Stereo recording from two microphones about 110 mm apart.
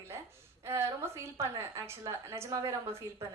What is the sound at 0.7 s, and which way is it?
A woman's voice, 25° right (ahead or behind).